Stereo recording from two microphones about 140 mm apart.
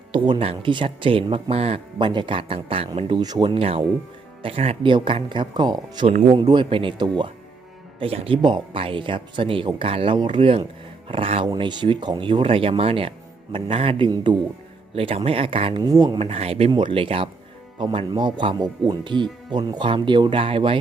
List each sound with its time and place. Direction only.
0.1 s speech: 35° right (ahead or behind)
3.2 s speech: 30° right (ahead or behind)
14.9 s speech: 45° right (ahead or behind)
15.8 s speech: 25° right (ahead or behind)
16.1 s speech: 45° right (ahead or behind)